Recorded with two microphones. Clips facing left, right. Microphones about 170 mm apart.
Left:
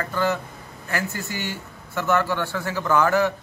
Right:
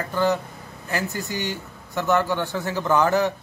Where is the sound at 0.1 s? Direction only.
15° right (ahead or behind).